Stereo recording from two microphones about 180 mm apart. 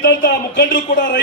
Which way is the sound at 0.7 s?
50° left (ahead or behind).